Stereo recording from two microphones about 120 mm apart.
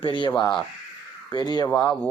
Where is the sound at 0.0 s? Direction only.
40° left (ahead or behind).